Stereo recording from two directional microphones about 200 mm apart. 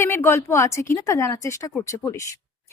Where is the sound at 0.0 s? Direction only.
10° left (ahead or behind).